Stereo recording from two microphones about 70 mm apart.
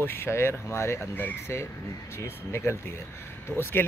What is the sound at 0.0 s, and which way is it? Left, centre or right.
Speech, left.